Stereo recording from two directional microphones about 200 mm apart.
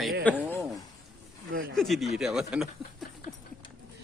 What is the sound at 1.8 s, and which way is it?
Speech, centre (ahead or behind).